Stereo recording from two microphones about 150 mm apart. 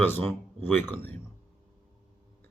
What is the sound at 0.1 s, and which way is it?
Speech, 15° left (ahead or behind).